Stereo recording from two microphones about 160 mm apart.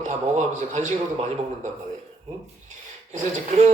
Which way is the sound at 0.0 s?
45° right (ahead or behind).